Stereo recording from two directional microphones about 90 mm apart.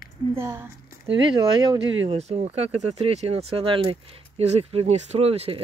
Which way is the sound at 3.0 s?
90° right.